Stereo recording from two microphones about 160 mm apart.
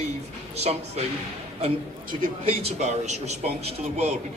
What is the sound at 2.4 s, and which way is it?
A man's voice, 40° right (ahead or behind).